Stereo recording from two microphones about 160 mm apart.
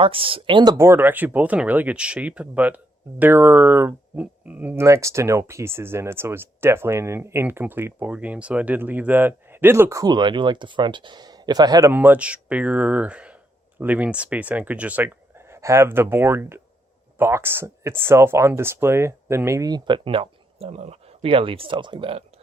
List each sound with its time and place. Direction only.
0.0 s speech: 35° right (ahead or behind)